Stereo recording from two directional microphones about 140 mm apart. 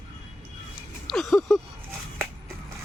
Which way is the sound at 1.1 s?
Centre (ahead or behind).